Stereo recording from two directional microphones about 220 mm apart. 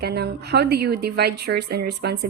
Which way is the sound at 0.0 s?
45° right (ahead or behind).